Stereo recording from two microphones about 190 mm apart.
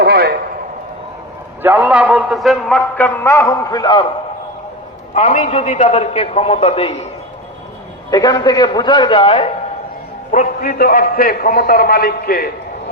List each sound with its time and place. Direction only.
0.0 s a sound: 55° right (ahead or behind)
1.6 s a man's voice: 10° right (ahead or behind); by 4.0 s 20° left (ahead or behind)
5.1 s a man's voice: 40° left (ahead or behind)
8.1 s a man's voice: 20° left (ahead or behind)
10.3 s a man's voice: 50° left (ahead or behind)